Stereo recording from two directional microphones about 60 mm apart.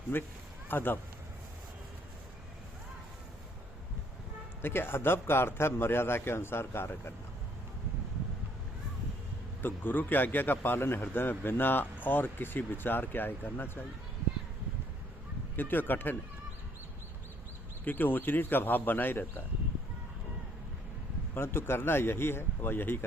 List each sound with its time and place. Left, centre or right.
0.1 s a man's voice: left
4.6 s a man's voice: left
9.6 s a man's voice: left
15.5 s a man's voice: left
17.8 s a man's voice: left
21.3 s a man's voice: left